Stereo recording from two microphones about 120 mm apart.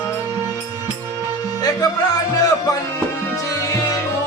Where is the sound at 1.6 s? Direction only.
30° left (ahead or behind).